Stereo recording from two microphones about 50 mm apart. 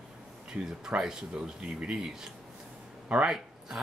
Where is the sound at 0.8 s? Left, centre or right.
Centre.